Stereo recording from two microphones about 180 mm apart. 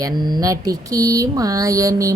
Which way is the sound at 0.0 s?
25° right (ahead or behind).